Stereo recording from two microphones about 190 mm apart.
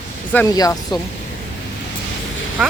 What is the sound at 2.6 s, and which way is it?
Speech, centre (ahead or behind).